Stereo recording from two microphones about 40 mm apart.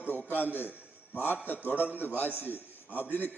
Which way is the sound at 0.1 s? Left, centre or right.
Left.